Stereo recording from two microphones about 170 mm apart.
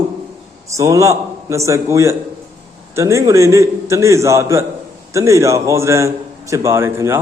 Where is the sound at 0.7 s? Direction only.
20° right (ahead or behind).